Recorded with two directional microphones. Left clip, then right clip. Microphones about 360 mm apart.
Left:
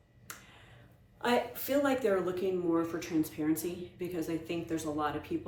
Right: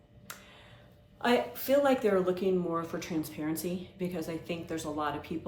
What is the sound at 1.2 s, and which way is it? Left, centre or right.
Speech, centre.